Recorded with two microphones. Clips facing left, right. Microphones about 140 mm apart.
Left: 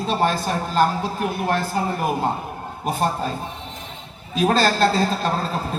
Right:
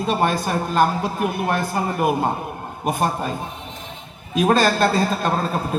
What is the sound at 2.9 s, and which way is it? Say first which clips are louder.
Speech: left 1 dB; 55° right (ahead or behind).